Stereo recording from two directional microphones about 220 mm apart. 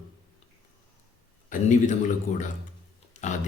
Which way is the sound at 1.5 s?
35° left (ahead or behind).